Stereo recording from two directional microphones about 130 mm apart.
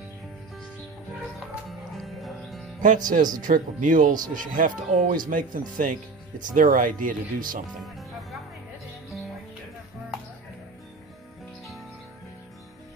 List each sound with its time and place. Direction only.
2.0 s music: centre (ahead or behind)
2.8 s speech: 90° right
7.8 s music: centre (ahead or behind)